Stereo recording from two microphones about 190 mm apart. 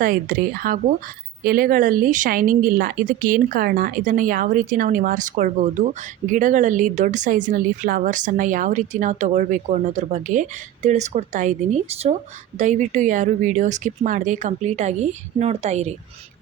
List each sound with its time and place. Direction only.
0.0 s speech: 45° right (ahead or behind)